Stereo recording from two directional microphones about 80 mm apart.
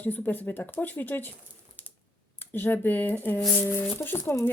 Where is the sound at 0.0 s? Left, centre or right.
Left.